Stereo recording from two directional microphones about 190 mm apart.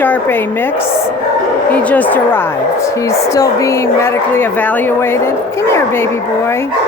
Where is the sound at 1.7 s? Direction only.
10° left (ahead or behind).